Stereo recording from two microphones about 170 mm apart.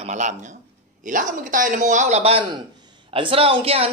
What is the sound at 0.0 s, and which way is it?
Speech, 45° right (ahead or behind).